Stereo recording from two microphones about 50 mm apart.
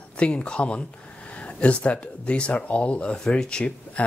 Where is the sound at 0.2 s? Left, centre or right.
Left.